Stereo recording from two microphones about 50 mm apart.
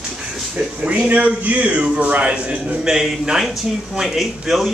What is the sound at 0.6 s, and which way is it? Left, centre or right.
A man's voice, right.